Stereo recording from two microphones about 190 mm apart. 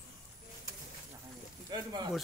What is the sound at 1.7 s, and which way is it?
Speech, 25° right (ahead or behind).